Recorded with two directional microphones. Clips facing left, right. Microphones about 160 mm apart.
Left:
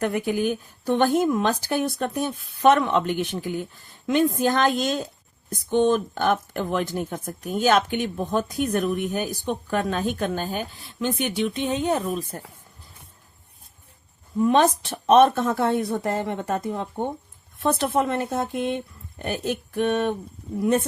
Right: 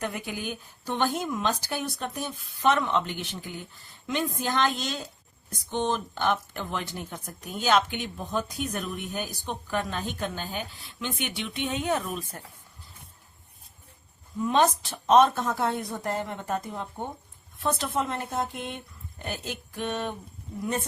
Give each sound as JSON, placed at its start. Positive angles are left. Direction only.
{"t": 0.0, "sound": "speech", "side_deg": 55}
{"t": 14.4, "sound": "speech", "side_deg": 55}